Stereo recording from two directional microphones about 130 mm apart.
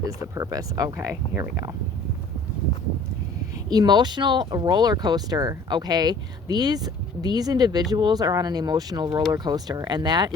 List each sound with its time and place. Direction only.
0.2 s speech: 25° right (ahead or behind)
1.1 s speech: 10° right (ahead or behind)
3.7 s speech: 30° right (ahead or behind)